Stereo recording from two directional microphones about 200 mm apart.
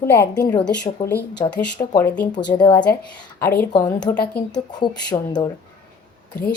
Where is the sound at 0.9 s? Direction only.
25° left (ahead or behind).